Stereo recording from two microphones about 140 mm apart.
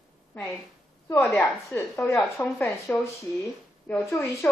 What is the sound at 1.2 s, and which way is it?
A woman's voice, 10° left (ahead or behind).